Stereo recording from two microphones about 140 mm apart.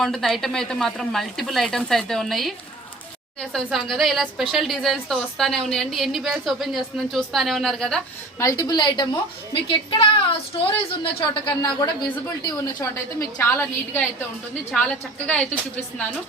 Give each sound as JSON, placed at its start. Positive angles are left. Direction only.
{"t": 0.0, "sound": "a woman's voice", "side_deg": 0}
{"t": 3.5, "sound": "a woman's voice", "side_deg": 0}
{"t": 8.4, "sound": "a man's voice", "side_deg": 25}
{"t": 12.8, "sound": "a woman's voice", "side_deg": 20}